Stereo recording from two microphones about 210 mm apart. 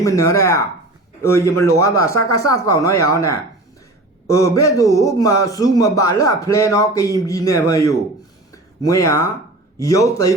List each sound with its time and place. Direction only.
0.0 s a man's voice: 15° left (ahead or behind)